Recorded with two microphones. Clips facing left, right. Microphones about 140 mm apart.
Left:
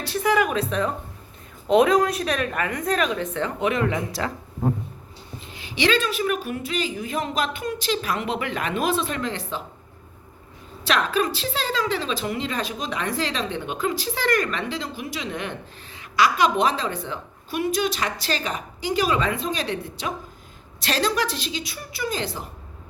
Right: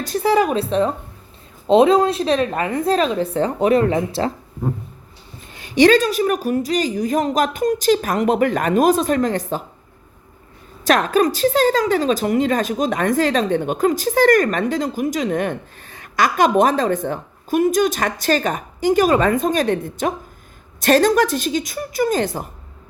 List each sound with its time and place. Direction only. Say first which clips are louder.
0.0 s a woman's voice: right 5 dB; 40° right (ahead or behind)
5.5 s a woman's voice: right 10 dB; 45° right (ahead or behind)
10.8 s a woman's voice: right 7 dB; 45° right (ahead or behind)